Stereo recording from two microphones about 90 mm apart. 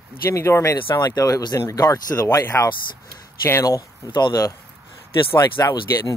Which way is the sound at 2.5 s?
25° left (ahead or behind).